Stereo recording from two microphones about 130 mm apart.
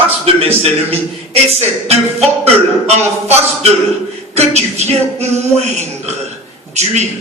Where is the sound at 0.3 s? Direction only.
50° right (ahead or behind).